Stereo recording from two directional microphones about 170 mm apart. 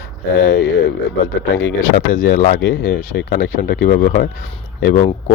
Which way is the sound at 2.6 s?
75° left (ahead or behind).